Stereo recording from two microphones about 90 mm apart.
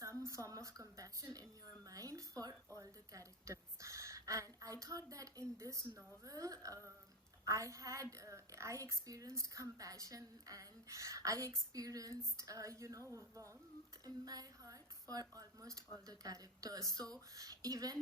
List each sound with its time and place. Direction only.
0.3 s a woman's voice: 35° right (ahead or behind)
14.0 s a woman's voice: 45° right (ahead or behind)